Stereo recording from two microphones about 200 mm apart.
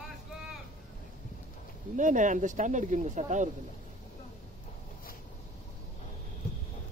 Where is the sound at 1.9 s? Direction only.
40° right (ahead or behind).